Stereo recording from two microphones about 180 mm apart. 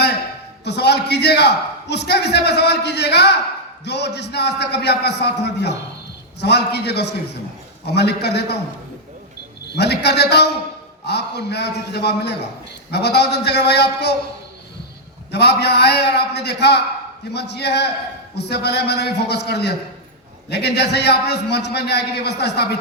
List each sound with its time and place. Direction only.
0.6 s a man's voice: 70° left (ahead or behind)
9.6 s a man's voice: 70° left (ahead or behind)
15.3 s a man's voice: 70° left (ahead or behind)